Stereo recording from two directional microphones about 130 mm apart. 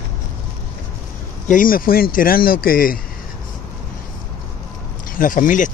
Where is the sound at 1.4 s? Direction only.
90° left.